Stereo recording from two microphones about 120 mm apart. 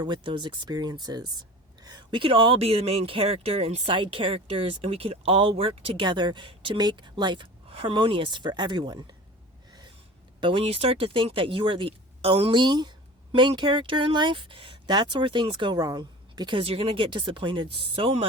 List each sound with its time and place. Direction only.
0.0 s speech: 40° right (ahead or behind)
10.4 s speech: 50° right (ahead or behind); by 16.6 s 35° right (ahead or behind)
16.6 s speech: 50° right (ahead or behind)